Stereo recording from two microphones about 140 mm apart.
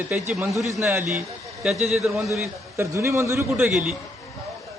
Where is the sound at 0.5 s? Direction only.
Centre (ahead or behind).